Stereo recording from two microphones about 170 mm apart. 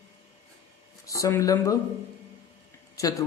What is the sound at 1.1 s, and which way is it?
Speech, 20° left (ahead or behind).